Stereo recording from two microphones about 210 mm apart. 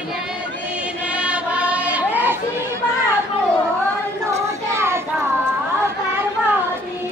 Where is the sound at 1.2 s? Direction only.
5° right (ahead or behind).